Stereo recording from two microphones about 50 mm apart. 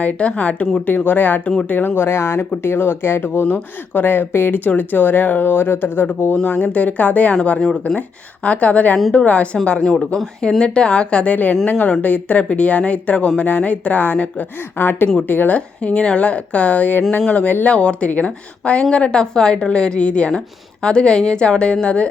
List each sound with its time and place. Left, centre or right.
0.0 s speech: left
2.0 s speech: left
3.4 s speech: left
4.6 s speech: left
6.3 s speech: left
9.8 s a woman's voice: centre
10.6 s speech: left
11.6 s speech: left
15.5 s a woman's voice: left